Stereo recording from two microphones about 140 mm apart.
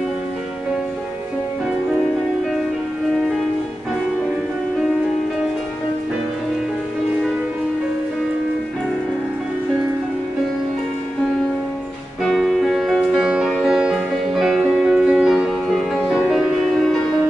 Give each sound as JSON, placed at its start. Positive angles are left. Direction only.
{"t": 12.3, "sound": "music", "side_deg": 0}